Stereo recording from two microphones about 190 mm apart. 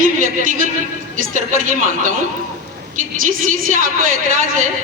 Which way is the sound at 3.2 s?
45° right (ahead or behind).